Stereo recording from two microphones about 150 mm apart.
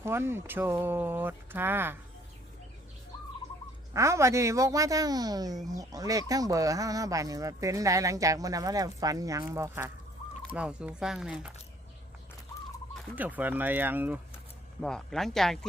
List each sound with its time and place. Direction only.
0.0 s speech: 15° right (ahead or behind)
3.9 s speech: 20° right (ahead or behind)
10.5 s speech: 5° right (ahead or behind)
13.1 s speech: 10° right (ahead or behind)
14.8 s speech: 5° left (ahead or behind)